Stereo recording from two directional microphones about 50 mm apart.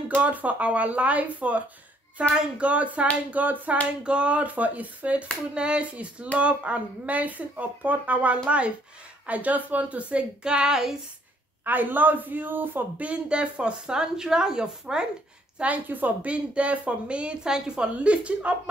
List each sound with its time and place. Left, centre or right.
0.2 s speech: right
4.0 s speech: right
11.6 s speech: right
13.0 s speech: right
15.6 s speech: right